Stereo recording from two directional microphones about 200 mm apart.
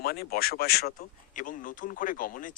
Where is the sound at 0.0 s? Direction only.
50° left (ahead or behind).